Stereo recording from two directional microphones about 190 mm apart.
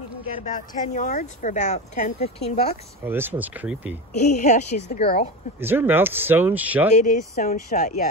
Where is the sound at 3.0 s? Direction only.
10° right (ahead or behind).